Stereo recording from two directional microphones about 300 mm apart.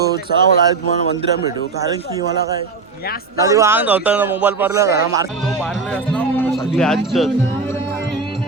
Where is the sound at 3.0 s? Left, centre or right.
Left.